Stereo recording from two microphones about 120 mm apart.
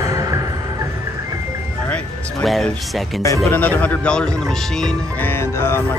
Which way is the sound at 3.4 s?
15° left (ahead or behind).